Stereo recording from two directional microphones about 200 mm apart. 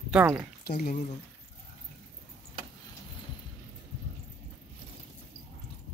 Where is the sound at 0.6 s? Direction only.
45° left (ahead or behind).